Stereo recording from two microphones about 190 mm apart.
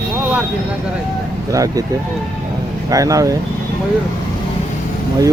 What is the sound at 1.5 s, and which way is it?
Speech, 20° right (ahead or behind).